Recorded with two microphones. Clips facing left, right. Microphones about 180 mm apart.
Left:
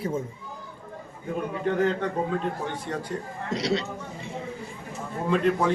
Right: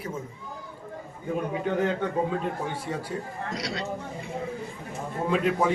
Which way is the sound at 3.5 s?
25° left (ahead or behind).